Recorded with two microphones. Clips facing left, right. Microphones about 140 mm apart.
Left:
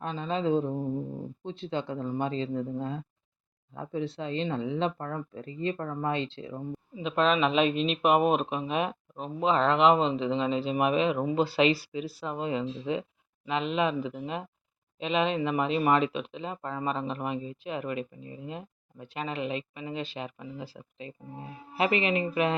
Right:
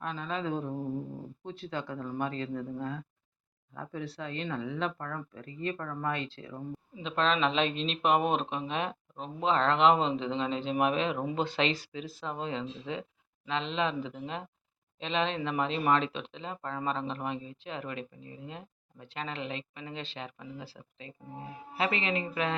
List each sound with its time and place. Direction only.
0.0 s speech: 30° left (ahead or behind)
7.0 s speech: 10° left (ahead or behind)